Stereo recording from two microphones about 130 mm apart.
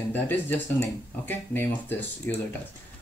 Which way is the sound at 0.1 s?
15° left (ahead or behind).